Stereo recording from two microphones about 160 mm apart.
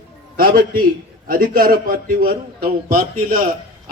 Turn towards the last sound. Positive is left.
turn(degrees=-60)  # may be behind; listen again after turning